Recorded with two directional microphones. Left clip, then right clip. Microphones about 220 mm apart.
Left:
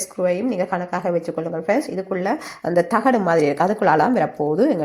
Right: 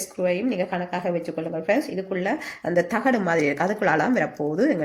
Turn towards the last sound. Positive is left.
turn(degrees=10)  # may be behind; listen again after turning